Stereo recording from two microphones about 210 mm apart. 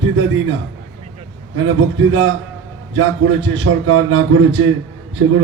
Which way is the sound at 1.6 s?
65° right (ahead or behind).